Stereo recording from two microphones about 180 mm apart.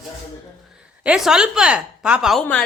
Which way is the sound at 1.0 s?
5° right (ahead or behind).